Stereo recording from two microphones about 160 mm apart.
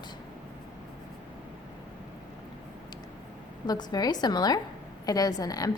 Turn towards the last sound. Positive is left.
turn(degrees=25)  # may be behind; listen again after turning